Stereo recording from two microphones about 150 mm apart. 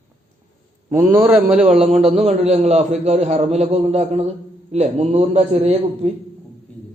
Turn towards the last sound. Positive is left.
turn(degrees=-45)  # may be behind; listen again after turning